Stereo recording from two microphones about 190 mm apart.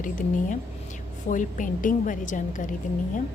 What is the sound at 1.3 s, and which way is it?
A woman's voice, 40° left (ahead or behind).